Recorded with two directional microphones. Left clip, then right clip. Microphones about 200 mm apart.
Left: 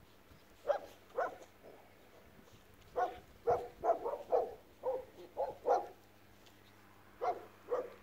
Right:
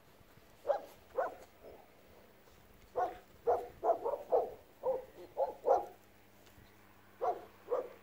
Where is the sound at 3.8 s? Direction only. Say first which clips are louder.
Right 1 dB; 15° right (ahead or behind).